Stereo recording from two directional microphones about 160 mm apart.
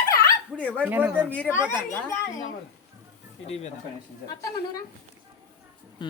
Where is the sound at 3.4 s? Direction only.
40° left (ahead or behind).